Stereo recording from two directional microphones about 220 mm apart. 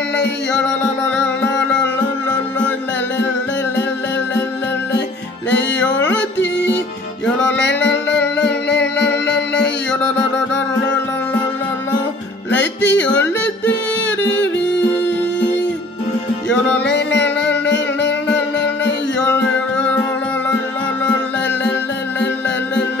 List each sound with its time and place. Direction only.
1.1 s music: 5° left (ahead or behind)
5.9 s yodeling: 10° left (ahead or behind)
7.5 s music: 50° left (ahead or behind)
8.4 s music: 5° left (ahead or behind)
12.8 s yodeling: 10° left (ahead or behind)
16.8 s music: 50° left (ahead or behind)